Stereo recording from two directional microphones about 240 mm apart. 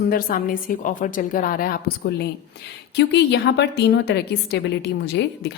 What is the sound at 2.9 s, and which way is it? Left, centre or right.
A woman's voice, left.